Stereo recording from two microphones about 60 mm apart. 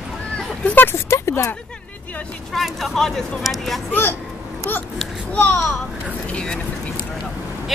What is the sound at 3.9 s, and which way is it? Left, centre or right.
Speech, left.